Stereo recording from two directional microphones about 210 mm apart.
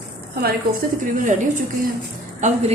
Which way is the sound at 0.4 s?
40° right (ahead or behind).